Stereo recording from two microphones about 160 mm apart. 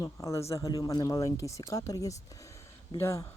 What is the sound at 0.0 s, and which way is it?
Speech, 20° left (ahead or behind).